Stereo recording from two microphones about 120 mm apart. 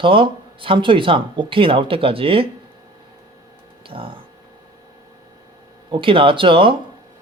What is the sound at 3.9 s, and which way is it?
Speech, 45° right (ahead or behind).